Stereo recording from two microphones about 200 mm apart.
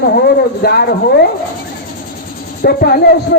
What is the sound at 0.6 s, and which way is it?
Speech, 55° left (ahead or behind).